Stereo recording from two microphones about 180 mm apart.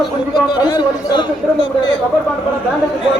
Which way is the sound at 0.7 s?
25° left (ahead or behind).